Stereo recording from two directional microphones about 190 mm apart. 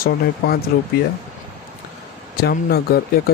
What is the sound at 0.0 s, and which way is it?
Speech, 50° left (ahead or behind).